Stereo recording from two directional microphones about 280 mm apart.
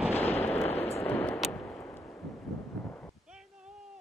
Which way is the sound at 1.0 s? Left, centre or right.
Centre.